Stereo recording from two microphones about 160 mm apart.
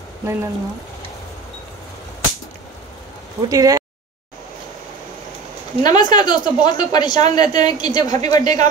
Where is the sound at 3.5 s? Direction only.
20° right (ahead or behind).